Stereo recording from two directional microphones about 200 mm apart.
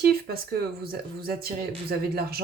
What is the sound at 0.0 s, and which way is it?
Speech, 50° right (ahead or behind).